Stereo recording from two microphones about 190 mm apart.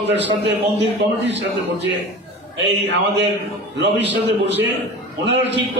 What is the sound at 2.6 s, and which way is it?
Speech, 65° right (ahead or behind).